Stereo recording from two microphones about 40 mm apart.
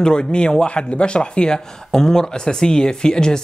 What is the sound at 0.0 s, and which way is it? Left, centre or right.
Speech, left.